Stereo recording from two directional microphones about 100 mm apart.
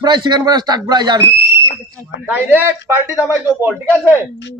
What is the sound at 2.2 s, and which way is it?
Speech, 20° right (ahead or behind).